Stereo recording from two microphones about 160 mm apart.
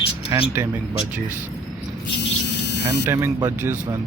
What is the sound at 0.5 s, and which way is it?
Speech, 15° right (ahead or behind).